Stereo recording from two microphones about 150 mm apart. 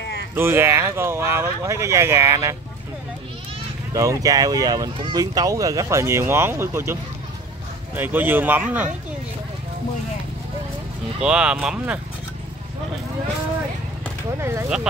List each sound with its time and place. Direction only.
0.4 s speech: 15° right (ahead or behind)
3.9 s speech: 20° right (ahead or behind)
11.1 s speech: 5° right (ahead or behind)
14.4 s speech: 20° right (ahead or behind)